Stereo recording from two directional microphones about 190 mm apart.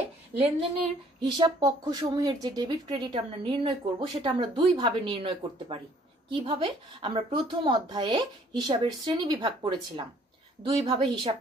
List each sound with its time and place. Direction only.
1.2 s speech: 20° right (ahead or behind)